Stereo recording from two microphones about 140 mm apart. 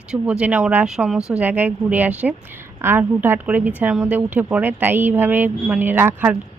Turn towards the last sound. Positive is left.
turn(degrees=-15)  # may be behind; listen again after turning